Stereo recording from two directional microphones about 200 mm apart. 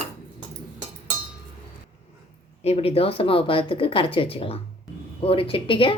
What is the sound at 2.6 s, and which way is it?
Speech, 30° left (ahead or behind).